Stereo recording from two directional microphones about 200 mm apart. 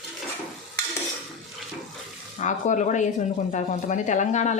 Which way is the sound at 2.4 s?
40° left (ahead or behind).